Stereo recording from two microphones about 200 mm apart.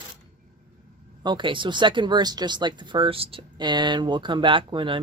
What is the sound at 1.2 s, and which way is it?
Speech, 20° right (ahead or behind).